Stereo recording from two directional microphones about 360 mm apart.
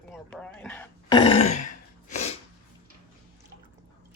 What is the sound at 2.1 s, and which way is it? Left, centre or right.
Sneeze, centre.